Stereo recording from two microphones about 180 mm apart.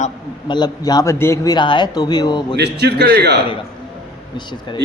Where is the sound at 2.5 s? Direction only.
65° right (ahead or behind).